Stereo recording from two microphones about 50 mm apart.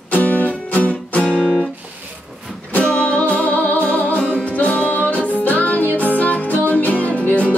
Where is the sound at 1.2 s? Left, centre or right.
Right.